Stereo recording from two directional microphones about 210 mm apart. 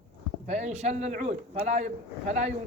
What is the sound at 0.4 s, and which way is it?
Speech, 30° right (ahead or behind).